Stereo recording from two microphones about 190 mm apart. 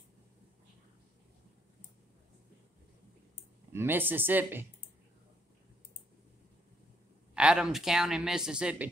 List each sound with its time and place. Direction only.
3.7 s speech: 10° right (ahead or behind)
7.3 s speech: 5° right (ahead or behind)